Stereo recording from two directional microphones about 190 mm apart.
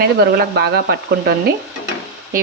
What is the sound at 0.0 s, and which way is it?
Speech, 60° right (ahead or behind).